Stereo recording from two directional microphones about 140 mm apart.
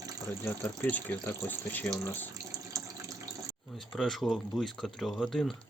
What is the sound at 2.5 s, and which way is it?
Water tap, 25° right (ahead or behind).